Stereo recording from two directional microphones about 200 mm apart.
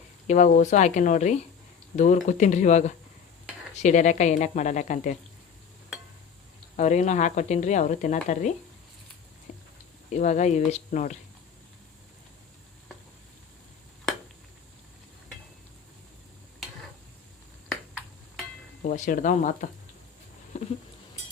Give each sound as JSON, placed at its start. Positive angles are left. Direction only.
{"t": 0.3, "sound": "a woman's voice", "side_deg": 40}
{"t": 6.7, "sound": "a woman's voice", "side_deg": 35}
{"t": 10.1, "sound": "a woman's voice", "side_deg": 35}
{"t": 18.8, "sound": "a woman's voice", "side_deg": 40}
{"t": 20.5, "sound": "a sound", "side_deg": 35}